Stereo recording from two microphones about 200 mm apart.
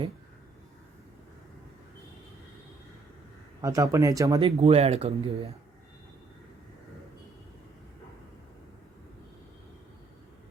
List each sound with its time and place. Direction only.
3.6 s speech: 15° right (ahead or behind)
4.4 s speech: 30° right (ahead or behind)